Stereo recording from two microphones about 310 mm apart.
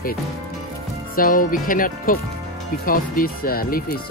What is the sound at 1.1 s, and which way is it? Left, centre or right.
Speech, left.